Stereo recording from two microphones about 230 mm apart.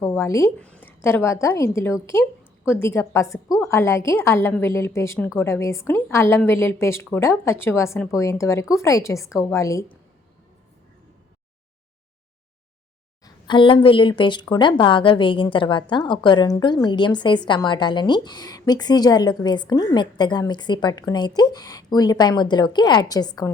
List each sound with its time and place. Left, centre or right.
0.0 s a woman's voice: centre
13.2 s a woman's voice: left